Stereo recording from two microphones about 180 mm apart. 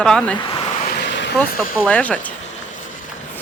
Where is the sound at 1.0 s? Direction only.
80° left.